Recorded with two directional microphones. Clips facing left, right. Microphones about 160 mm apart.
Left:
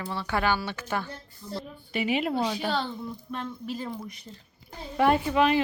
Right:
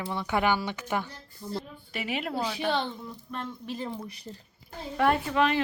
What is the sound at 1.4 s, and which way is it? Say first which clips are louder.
Speech: right 2 dB; 50° right (ahead or behind).